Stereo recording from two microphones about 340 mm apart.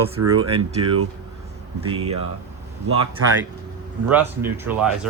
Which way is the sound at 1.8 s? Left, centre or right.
Centre.